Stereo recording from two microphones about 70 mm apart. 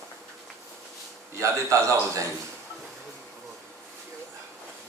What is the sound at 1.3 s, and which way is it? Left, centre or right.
Speech, right.